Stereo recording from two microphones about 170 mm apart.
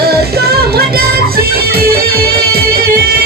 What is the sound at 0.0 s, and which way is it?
Music, 70° right (ahead or behind).